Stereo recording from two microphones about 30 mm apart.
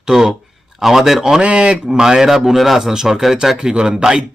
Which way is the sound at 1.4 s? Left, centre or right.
Right.